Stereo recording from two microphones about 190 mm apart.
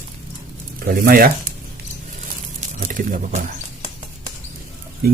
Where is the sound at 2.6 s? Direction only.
40° right (ahead or behind).